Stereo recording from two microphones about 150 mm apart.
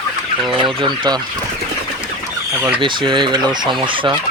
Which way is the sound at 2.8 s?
30° right (ahead or behind).